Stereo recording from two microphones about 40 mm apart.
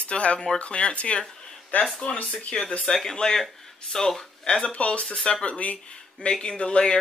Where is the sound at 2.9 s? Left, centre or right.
Centre; by 5.8 s left.